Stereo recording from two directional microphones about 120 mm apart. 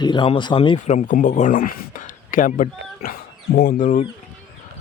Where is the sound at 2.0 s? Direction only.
90° left.